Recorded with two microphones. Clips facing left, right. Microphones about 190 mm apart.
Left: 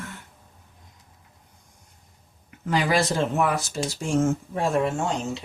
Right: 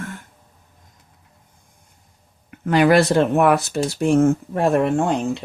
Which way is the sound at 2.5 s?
65° right (ahead or behind).